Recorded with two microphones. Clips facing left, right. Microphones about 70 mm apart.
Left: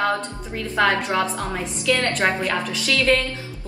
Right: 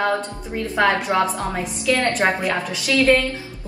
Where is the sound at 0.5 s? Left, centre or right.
Centre.